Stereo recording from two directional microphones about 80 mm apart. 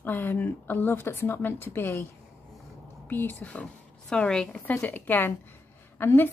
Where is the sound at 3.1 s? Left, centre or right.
Left; by 4.6 s centre.